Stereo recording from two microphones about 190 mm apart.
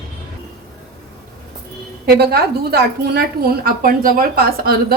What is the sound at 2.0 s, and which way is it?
A woman's voice, 55° right (ahead or behind).